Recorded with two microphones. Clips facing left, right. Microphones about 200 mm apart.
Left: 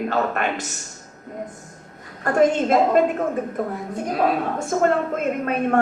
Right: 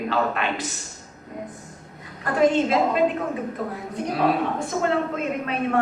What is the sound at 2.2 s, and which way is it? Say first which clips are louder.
Speech: left 2 dB; 45° left (ahead or behind).